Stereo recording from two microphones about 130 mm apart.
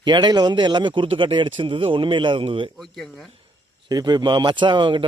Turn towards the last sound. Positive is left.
turn(degrees=-40)  # may be behind; listen again after turning